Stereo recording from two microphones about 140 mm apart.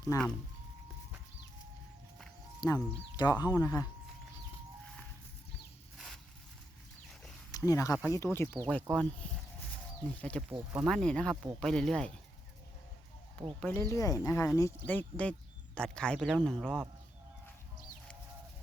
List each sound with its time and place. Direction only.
0.1 s speech: 25° left (ahead or behind)
2.6 s speech: 25° left (ahead or behind)
7.5 s speech: 25° left (ahead or behind)
8.6 s speech: 5° left (ahead or behind)
10.2 s speech: 10° left (ahead or behind)
13.6 s speech: 15° left (ahead or behind)